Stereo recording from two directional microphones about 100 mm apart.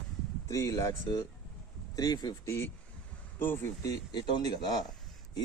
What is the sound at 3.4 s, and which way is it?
Speech, 20° left (ahead or behind).